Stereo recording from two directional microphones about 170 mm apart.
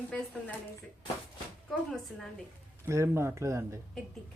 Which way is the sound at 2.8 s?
15° right (ahead or behind).